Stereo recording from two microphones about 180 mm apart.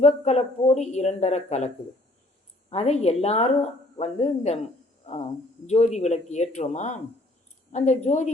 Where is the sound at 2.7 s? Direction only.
35° left (ahead or behind).